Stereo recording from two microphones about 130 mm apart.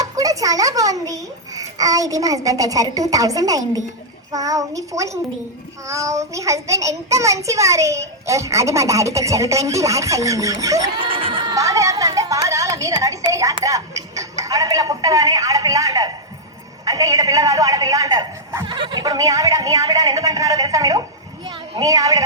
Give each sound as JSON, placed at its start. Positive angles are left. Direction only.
{"t": 0.0, "sound": "a child's voice", "side_deg": -25}
{"t": 11.0, "sound": "crowd", "side_deg": -45}
{"t": 11.5, "sound": "a child's voice", "side_deg": -25}